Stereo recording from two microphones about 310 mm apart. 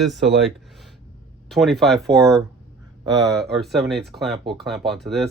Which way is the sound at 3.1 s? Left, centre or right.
Centre.